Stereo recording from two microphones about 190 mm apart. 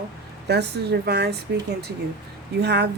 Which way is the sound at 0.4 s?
60° right (ahead or behind).